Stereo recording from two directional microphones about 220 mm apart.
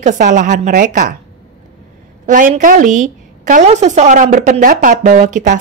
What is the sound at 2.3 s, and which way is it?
A woman's voice, 35° right (ahead or behind).